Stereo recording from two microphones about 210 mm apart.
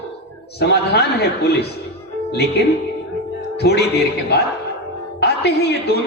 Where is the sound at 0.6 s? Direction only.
50° left (ahead or behind).